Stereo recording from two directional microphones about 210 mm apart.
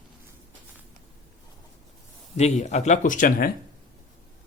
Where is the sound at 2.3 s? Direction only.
30° left (ahead or behind).